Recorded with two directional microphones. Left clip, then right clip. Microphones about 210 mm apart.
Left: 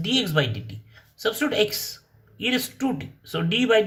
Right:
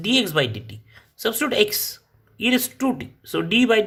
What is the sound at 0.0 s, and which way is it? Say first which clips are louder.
Speech: right 3 dB; 45° right (ahead or behind).